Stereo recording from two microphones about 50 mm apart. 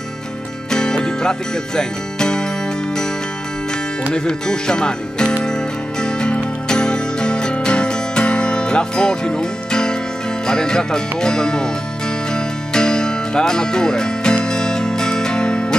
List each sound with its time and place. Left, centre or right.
0.7 s music: centre
4.1 s music: centre
10.4 s speech: centre
12.7 s music: centre